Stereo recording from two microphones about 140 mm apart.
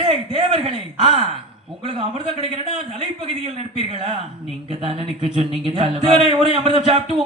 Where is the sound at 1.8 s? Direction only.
45° right (ahead or behind).